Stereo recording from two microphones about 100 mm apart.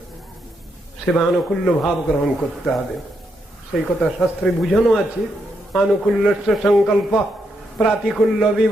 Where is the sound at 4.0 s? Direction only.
5° left (ahead or behind).